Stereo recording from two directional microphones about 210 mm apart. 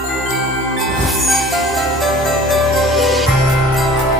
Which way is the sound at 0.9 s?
Centre (ahead or behind).